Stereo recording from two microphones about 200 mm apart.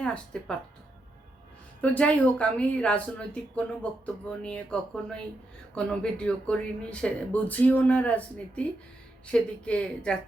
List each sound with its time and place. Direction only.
0.0 s speech: 5° left (ahead or behind)
1.8 s speech: 5° left (ahead or behind)